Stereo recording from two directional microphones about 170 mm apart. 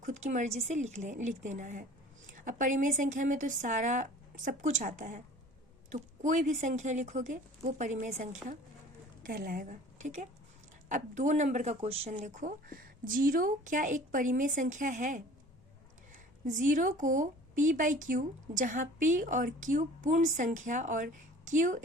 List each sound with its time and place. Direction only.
0.0 s a woman's voice: 45° right (ahead or behind)
16.5 s speech: 50° right (ahead or behind)